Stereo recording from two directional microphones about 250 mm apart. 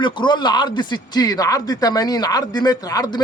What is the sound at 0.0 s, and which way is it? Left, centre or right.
A man's voice, centre.